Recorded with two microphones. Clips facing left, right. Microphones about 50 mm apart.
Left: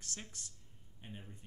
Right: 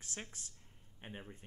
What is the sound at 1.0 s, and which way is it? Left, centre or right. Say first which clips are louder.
Speech: right 2 dB; right.